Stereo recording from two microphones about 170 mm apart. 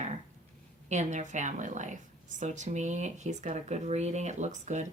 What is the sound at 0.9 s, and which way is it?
Speech, 45° right (ahead or behind).